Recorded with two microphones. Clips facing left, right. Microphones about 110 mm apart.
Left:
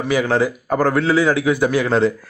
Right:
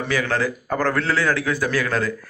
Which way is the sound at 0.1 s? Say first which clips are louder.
Left 6 dB; 20° left (ahead or behind).